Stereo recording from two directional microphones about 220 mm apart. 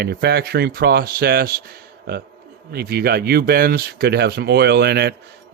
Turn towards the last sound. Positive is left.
turn(degrees=-45)  # may be behind; listen again after turning